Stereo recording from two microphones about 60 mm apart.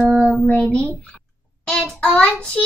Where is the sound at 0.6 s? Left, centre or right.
Centre.